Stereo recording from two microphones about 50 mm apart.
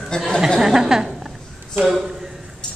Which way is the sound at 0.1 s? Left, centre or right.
Centre.